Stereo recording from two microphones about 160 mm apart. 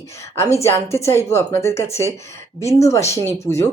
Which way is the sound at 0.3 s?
15° left (ahead or behind).